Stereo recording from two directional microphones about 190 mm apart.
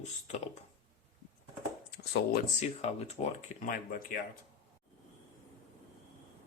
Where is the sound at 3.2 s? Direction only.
30° left (ahead or behind).